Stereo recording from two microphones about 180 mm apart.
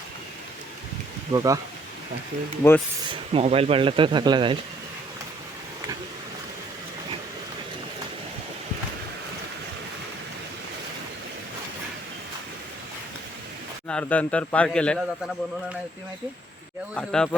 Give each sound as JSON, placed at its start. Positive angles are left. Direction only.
{"t": 1.3, "sound": "speech", "side_deg": -20}
{"t": 2.6, "sound": "a man's voice", "side_deg": 15}
{"t": 3.1, "sound": "speech", "side_deg": -30}
{"t": 13.8, "sound": "a man's voice", "side_deg": 10}
{"t": 16.9, "sound": "speech", "side_deg": 5}